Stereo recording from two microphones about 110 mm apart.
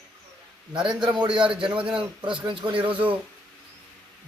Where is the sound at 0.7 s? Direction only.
45° right (ahead or behind).